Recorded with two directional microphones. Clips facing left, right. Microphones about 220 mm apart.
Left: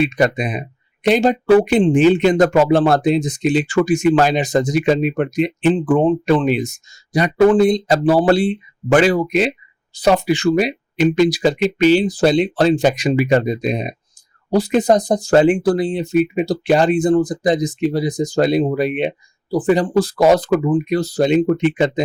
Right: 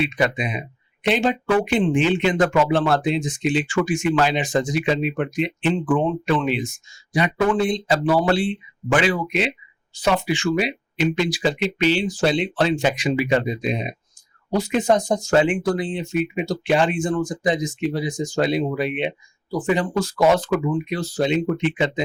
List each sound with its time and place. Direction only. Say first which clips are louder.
0.0 s speech: left 5 dB; 45° left (ahead or behind)